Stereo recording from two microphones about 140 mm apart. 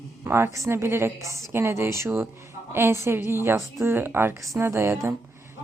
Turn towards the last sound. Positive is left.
turn(degrees=-20)  # may be behind; listen again after turning